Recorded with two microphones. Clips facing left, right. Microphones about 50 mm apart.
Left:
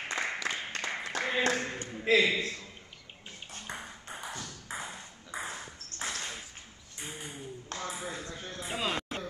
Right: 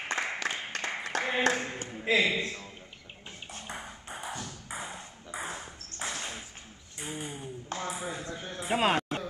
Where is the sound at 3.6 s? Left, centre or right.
Centre.